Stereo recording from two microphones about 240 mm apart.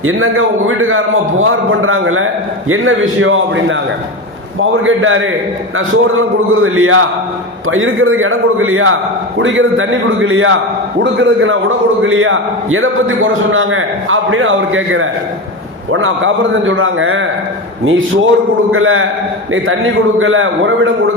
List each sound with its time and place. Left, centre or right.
0.0 s a man's voice: right
18.7 s a man's voice: right